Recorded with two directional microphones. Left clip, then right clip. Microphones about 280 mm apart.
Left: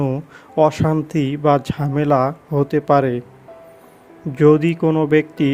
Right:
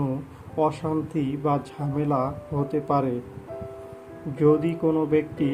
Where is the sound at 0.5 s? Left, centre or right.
Left.